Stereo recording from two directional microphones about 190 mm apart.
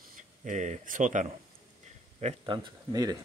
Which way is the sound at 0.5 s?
40° right (ahead or behind).